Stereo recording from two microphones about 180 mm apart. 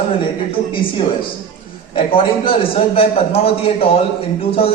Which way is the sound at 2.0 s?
30° left (ahead or behind).